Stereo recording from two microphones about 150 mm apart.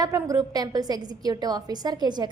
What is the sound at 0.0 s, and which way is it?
A woman's voice, 25° right (ahead or behind).